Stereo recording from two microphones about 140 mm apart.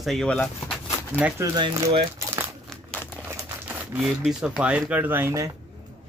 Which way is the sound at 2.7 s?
10° left (ahead or behind).